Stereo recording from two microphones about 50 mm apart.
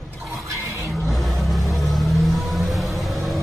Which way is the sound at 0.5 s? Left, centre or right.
Right.